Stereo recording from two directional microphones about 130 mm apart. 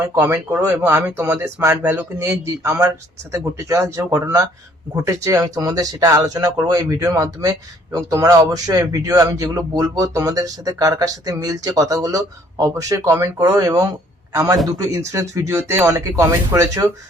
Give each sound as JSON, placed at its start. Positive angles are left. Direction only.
{"t": 0.2, "sound": "a man's voice", "side_deg": -15}